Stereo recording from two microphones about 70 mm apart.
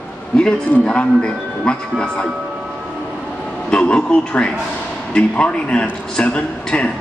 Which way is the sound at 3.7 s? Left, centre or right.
Centre.